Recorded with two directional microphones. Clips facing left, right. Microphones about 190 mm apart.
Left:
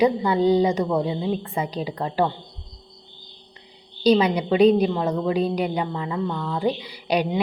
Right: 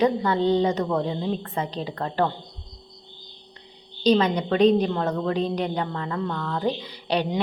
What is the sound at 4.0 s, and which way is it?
A woman's voice, 10° left (ahead or behind).